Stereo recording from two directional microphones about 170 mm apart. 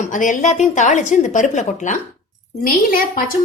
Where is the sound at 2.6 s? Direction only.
60° left (ahead or behind).